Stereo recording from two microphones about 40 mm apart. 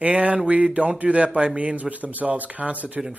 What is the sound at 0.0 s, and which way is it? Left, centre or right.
Speech, right.